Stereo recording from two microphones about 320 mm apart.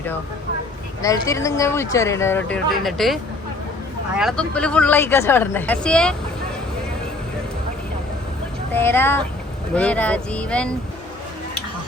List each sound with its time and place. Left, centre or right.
1.0 s speech: centre
4.2 s speech: centre
8.7 s speech: centre